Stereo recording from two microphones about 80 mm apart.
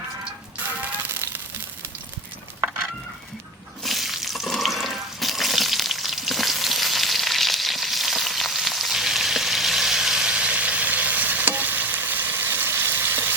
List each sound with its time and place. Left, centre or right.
3.8 s water: centre; by 13.3 s right